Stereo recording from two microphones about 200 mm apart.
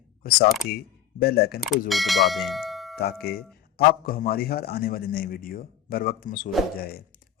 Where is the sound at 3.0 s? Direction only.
50° left (ahead or behind).